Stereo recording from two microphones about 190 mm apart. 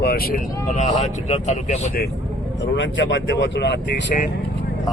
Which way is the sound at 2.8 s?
70° left (ahead or behind).